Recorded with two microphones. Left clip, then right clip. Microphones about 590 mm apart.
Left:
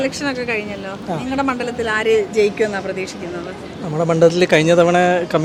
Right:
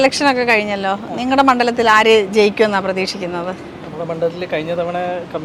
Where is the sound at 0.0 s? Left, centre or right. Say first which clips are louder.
Right 8 dB; centre.